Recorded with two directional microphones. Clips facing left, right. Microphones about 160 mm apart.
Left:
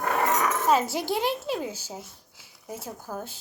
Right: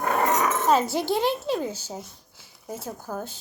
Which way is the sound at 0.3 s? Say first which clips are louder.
Right 2 dB; 20° right (ahead or behind).